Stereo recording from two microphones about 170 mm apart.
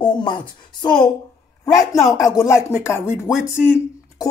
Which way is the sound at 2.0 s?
20° left (ahead or behind).